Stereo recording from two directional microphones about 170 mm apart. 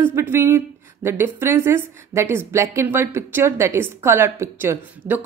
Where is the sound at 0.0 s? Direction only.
15° right (ahead or behind).